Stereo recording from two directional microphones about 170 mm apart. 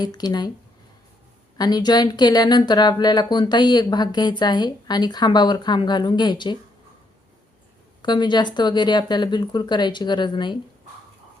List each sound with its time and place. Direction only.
0.0 s speech: 25° left (ahead or behind)
1.5 s speech: 25° left (ahead or behind)
8.0 s speech: 25° left (ahead or behind)